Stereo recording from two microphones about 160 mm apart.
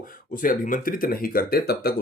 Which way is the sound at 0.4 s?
60° left (ahead or behind).